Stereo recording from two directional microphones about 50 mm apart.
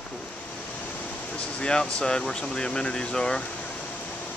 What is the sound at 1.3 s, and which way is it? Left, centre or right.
Speech, left.